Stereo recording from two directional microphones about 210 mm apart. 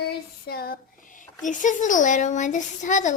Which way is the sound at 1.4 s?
35° left (ahead or behind).